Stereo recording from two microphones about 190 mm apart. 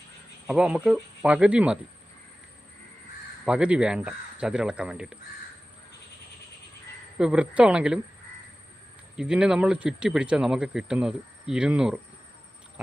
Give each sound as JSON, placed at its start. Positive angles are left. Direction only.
{"t": 0.4, "sound": "speech", "side_deg": -5}
{"t": 3.4, "sound": "speech", "side_deg": -5}
{"t": 7.2, "sound": "speech", "side_deg": -5}
{"t": 9.1, "sound": "speech", "side_deg": -5}